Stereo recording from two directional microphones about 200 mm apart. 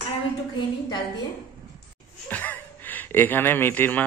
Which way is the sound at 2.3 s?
10° left (ahead or behind).